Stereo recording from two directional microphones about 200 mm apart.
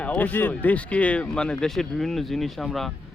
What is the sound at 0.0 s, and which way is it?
Speech, 5° left (ahead or behind).